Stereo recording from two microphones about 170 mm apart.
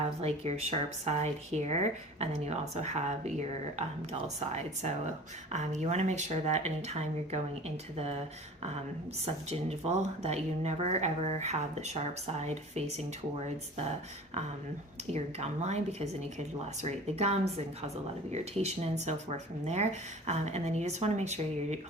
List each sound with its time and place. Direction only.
0.2 s speech: 40° right (ahead or behind)
9.2 s speech: 35° right (ahead or behind)
15.1 s speech: 40° right (ahead or behind)